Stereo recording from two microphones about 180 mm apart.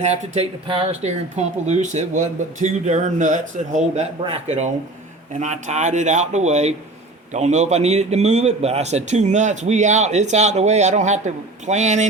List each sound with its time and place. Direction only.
0.0 s speech: 40° right (ahead or behind)